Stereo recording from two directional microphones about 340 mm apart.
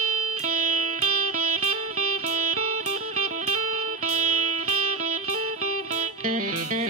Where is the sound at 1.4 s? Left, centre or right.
Right.